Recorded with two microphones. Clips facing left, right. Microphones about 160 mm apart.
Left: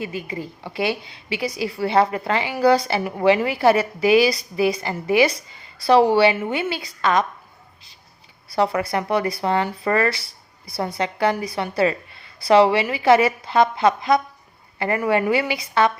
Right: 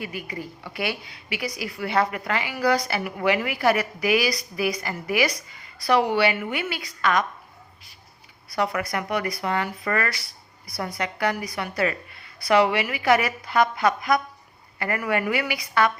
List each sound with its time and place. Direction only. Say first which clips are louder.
0.0 s a woman's voice: left 4 dB; 25° left (ahead or behind)
8.4 s a woman's voice: left 5 dB; 30° left (ahead or behind)